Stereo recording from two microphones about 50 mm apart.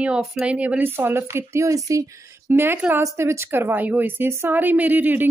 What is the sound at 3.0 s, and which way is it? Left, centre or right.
Speech, right.